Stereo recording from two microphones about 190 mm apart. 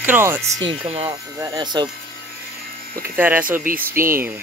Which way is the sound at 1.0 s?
20° right (ahead or behind).